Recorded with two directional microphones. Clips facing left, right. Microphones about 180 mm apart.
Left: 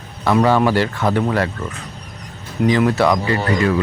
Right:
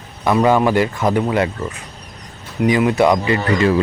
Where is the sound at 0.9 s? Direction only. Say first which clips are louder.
Right 1 dB; 10° right (ahead or behind).